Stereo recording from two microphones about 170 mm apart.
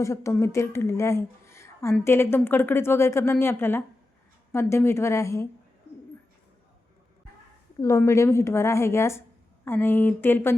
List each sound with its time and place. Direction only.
0.0 s a woman's voice: 15° left (ahead or behind)
7.8 s a woman's voice: 15° left (ahead or behind)